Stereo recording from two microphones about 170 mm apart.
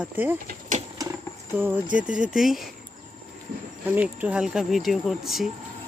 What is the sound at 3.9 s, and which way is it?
Speech, 10° right (ahead or behind).